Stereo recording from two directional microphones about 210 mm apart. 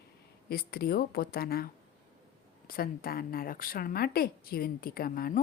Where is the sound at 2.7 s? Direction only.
45° left (ahead or behind).